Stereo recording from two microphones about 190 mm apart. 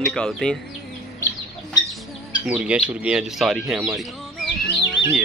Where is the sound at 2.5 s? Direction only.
5° right (ahead or behind).